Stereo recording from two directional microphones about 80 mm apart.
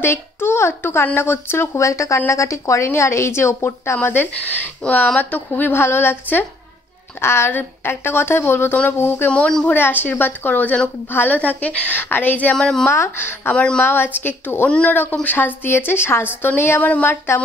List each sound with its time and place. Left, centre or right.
0.0 s a woman's voice: left
4.0 s a woman's voice: left
9.3 s a woman's voice: centre
9.7 s a woman's voice: left
12.5 s a woman's voice: centre
12.9 s a woman's voice: left
13.6 s a woman's voice: centre
13.8 s a woman's voice: left